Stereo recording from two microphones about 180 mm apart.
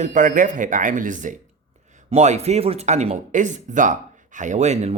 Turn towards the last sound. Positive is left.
turn(degrees=-40)  # may be behind; listen again after turning